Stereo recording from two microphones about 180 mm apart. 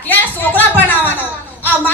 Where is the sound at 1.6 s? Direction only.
10° left (ahead or behind).